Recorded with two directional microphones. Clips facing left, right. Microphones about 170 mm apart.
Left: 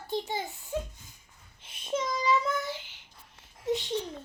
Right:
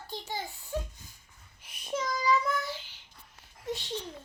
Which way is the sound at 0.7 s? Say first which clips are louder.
Left 2 dB; 20° left (ahead or behind).